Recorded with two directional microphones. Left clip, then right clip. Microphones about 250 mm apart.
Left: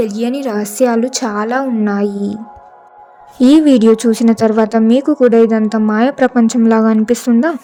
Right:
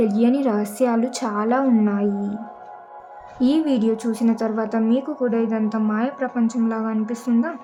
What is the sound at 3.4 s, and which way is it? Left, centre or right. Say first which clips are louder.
A woman's voice: left 11 dB; left.